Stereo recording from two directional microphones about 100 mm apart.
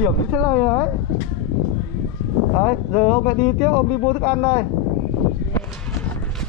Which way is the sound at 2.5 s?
25° left (ahead or behind).